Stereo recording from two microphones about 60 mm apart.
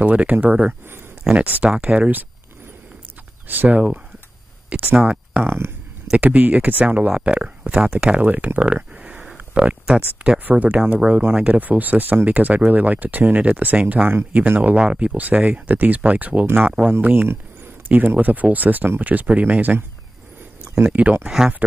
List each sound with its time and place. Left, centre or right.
0.0 s speech: right
3.4 s speech: right
4.6 s a sound: right
4.9 s speech: centre
5.4 s speech: right
6.1 s speech: right
8.3 s speech: right
21.2 s speech: centre